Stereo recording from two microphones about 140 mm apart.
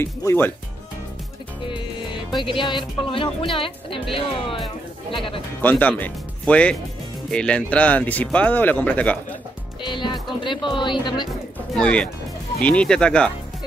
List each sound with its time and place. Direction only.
0.0 s speech: 15° left (ahead or behind)
2.3 s speech: 35° left (ahead or behind)
5.6 s speech: 10° left (ahead or behind)
9.8 s speech: 35° left (ahead or behind)
11.7 s speech: 5° left (ahead or behind)